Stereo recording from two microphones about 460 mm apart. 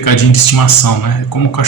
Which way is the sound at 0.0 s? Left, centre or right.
Left.